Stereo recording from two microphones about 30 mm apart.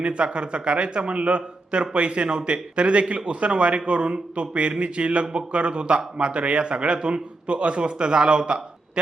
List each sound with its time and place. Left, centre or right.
0.0 s speech: right